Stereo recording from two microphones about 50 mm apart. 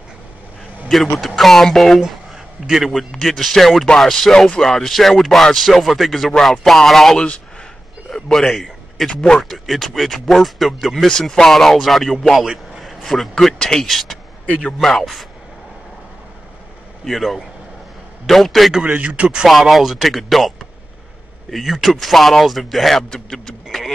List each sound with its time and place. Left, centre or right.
1.1 s speech: centre
2.6 s a man's voice: centre
2.9 s a man's voice: centre
9.4 s speech: centre
11.1 s speech: centre
12.4 s a sound: centre
13.0 s speech: centre
17.0 s speech: centre
18.9 s speech: right
19.7 s speech: centre